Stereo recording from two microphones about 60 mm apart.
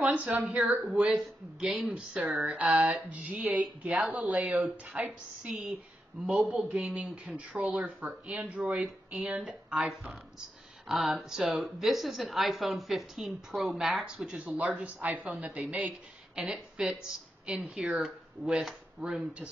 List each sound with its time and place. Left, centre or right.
0.0 s speech: right
5.5 s a woman's voice: centre
9.8 s a woman's voice: centre
14.4 s speech: right
16.3 s a woman's voice: centre